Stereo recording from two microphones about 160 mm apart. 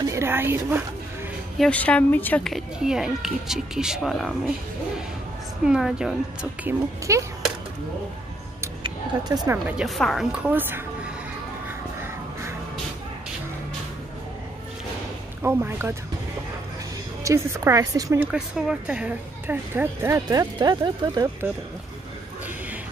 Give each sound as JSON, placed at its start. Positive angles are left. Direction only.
{"t": 0.0, "sound": "a sound", "side_deg": -15}
{"t": 1.6, "sound": "a child's voice", "side_deg": 10}
{"t": 5.7, "sound": "a child's voice", "side_deg": -5}
{"t": 6.6, "sound": "a woman's voice", "side_deg": -20}
{"t": 8.8, "sound": "a sound", "side_deg": -25}
{"t": 9.7, "sound": "a child's voice", "side_deg": 0}
{"t": 15.4, "sound": "speech", "side_deg": -15}
{"t": 17.2, "sound": "a woman's voice", "side_deg": -20}
{"t": 18.2, "sound": "speech", "side_deg": -5}